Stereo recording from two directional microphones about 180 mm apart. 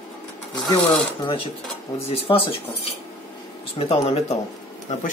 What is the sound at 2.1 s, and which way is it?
Speech, 30° left (ahead or behind).